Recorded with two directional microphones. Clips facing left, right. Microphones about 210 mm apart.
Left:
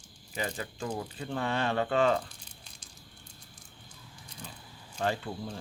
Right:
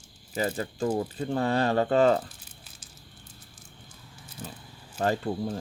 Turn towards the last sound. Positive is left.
turn(degrees=-40)  # may be behind; listen again after turning